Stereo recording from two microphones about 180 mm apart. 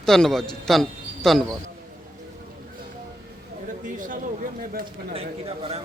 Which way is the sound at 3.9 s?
45° right (ahead or behind).